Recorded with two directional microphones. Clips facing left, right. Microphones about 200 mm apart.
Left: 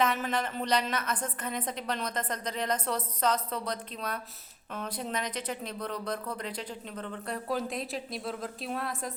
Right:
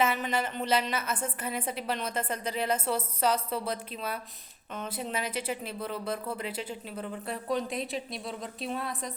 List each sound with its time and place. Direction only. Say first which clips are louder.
0.0 s a woman's voice: right 1 dB; 5° right (ahead or behind)